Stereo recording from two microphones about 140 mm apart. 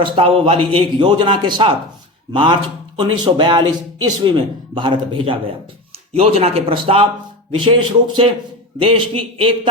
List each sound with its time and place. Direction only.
0.0 s speech: 40° right (ahead or behind)
6.1 s speech: 50° right (ahead or behind)